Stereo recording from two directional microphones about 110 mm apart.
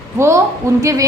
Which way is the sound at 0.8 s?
30° right (ahead or behind).